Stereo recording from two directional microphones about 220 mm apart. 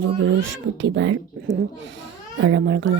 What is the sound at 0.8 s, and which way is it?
A child's voice, 55° right (ahead or behind).